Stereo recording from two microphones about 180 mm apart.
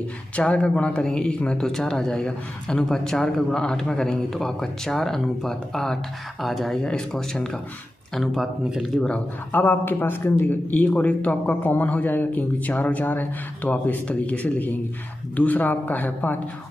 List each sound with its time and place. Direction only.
0.4 s speech: 5° left (ahead or behind)